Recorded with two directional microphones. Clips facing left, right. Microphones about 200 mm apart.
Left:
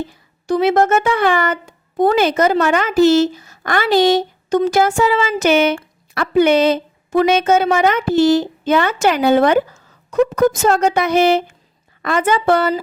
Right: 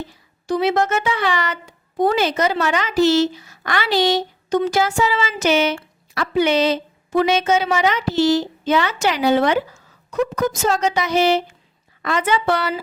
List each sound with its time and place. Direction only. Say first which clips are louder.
0.4 s speech: left 4 dB; 50° left (ahead or behind)